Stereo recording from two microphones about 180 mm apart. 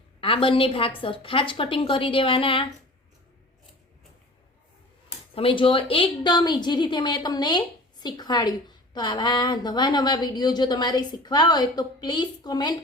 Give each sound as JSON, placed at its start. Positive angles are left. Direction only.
{"t": 0.2, "sound": "a woman's voice", "side_deg": 30}
{"t": 5.3, "sound": "a woman's voice", "side_deg": 30}